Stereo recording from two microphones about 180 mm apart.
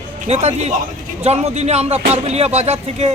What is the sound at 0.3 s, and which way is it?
Speech, 35° right (ahead or behind).